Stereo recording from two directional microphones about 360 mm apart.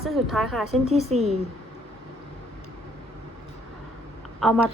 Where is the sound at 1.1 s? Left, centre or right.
Centre.